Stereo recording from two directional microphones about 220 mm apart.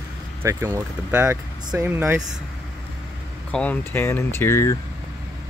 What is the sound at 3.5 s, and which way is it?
Speech, 5° left (ahead or behind).